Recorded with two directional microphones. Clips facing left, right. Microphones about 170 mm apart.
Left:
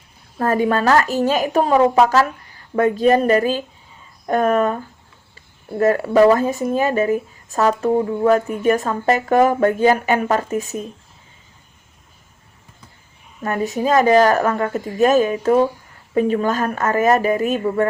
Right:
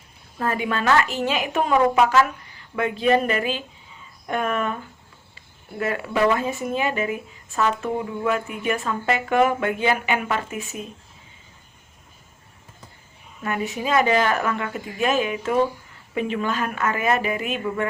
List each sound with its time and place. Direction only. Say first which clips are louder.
0.3 s speech: left 7 dB; 40° left (ahead or behind)
13.4 s speech: left 6 dB; 40° left (ahead or behind)